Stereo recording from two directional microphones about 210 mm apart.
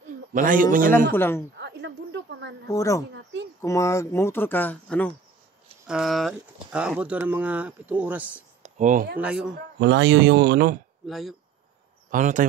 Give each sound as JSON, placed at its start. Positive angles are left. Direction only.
{"t": 0.3, "sound": "a man's voice", "side_deg": -40}
{"t": 1.1, "sound": "speech", "side_deg": 10}
{"t": 1.6, "sound": "a sound", "side_deg": -55}
{"t": 2.7, "sound": "speech", "side_deg": 15}
{"t": 8.6, "sound": "speech", "side_deg": -35}
{"t": 9.2, "sound": "a man's voice", "side_deg": -5}
{"t": 9.8, "sound": "speech", "side_deg": -60}
{"t": 11.1, "sound": "a man's voice", "side_deg": 0}
{"t": 12.1, "sound": "a man's voice", "side_deg": -40}